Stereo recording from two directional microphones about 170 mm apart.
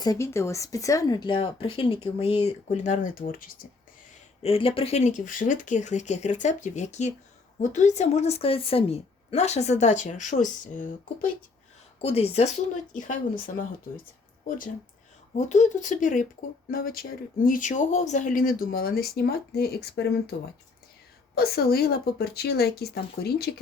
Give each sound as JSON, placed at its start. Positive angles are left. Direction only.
{"t": 0.0, "sound": "speech", "side_deg": 20}
{"t": 4.4, "sound": "a woman's voice", "side_deg": 35}
{"t": 12.0, "sound": "a woman's voice", "side_deg": 35}
{"t": 12.9, "sound": "speech", "side_deg": 50}
{"t": 15.4, "sound": "speech", "side_deg": 45}
{"t": 21.3, "sound": "a woman's voice", "side_deg": 65}